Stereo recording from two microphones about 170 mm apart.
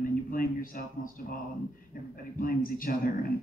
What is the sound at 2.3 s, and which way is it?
Speech, 55° left (ahead or behind).